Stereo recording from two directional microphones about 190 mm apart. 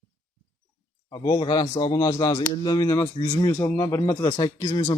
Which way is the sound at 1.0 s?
20° left (ahead or behind).